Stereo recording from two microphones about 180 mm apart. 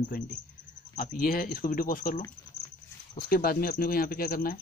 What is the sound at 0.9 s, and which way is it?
Speech, 55° left (ahead or behind).